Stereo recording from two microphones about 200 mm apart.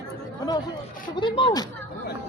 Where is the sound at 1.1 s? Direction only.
25° left (ahead or behind).